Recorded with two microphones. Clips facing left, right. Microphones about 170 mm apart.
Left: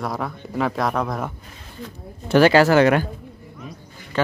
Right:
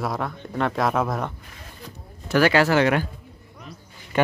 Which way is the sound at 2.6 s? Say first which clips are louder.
Left 4 dB; 45° left (ahead or behind).